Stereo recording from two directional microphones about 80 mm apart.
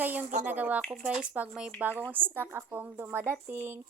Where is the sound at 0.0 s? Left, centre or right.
Right.